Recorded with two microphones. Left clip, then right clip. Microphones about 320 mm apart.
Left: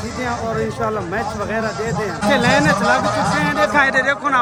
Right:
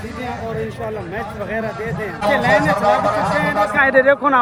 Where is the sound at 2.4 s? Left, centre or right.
Centre.